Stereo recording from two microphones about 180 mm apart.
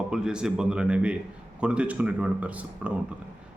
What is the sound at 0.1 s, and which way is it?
Speech, 5° right (ahead or behind).